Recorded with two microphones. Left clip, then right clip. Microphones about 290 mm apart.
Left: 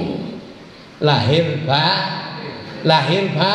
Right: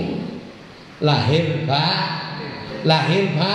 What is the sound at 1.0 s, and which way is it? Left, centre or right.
A man's voice, left.